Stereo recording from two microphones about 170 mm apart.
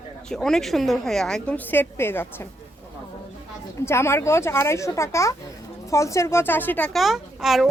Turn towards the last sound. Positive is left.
turn(degrees=0)  # may be behind; listen again after turning